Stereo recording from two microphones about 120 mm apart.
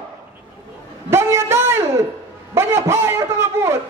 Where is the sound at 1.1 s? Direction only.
20° right (ahead or behind).